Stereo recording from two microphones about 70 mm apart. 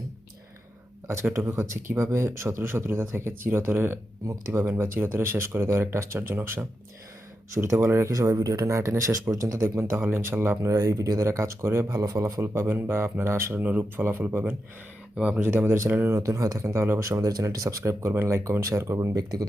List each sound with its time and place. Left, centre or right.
1.0 s speech: right
4.3 s speech: right
4.8 s speech: right
8.1 s speech: right
9.6 s speech: right
10.6 s speech: right
12.4 s speech: right
13.6 s speech: right
15.1 s speech: centre
15.4 s speech: right
16.2 s speech: right